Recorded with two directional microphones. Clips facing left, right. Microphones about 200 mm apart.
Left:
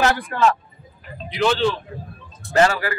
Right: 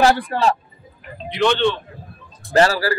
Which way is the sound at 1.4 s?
5° left (ahead or behind).